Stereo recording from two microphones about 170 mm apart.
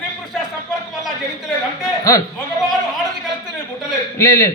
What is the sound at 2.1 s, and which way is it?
Speech, 20° left (ahead or behind).